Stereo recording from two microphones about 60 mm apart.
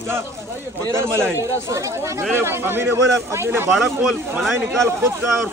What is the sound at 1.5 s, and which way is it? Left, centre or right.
Speech, right.